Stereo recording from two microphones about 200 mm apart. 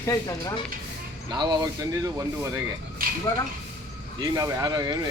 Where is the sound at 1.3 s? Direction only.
20° right (ahead or behind).